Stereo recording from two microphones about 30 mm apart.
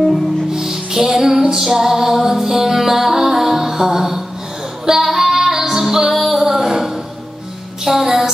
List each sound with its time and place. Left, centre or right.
0.5 s music: centre
6.4 s a sound: centre
7.8 s music: centre